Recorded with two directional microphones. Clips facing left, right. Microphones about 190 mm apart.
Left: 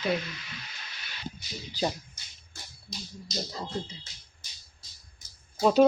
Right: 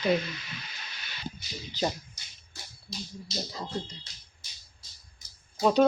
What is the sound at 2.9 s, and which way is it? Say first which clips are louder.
Speech: right 3 dB; 45° left (ahead or behind).